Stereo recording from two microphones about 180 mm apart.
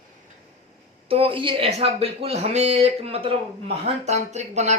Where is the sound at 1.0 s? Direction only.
30° right (ahead or behind).